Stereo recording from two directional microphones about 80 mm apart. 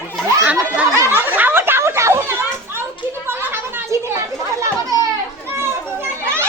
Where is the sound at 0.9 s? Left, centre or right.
Right.